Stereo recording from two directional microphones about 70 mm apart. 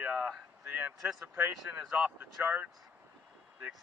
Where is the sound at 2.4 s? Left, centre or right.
Right.